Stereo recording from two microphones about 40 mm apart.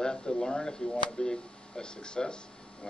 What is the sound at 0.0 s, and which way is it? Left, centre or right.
A man's voice, centre.